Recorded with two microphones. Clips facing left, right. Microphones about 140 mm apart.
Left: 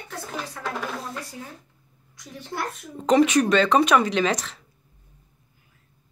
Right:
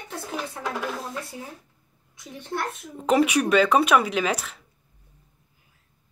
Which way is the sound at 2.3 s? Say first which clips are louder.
Right 1 dB; centre (ahead or behind).